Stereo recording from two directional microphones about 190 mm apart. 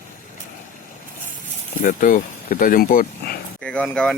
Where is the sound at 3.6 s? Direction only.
5° left (ahead or behind).